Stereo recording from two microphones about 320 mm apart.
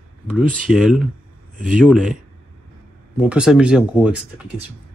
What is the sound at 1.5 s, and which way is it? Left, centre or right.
Speech, right.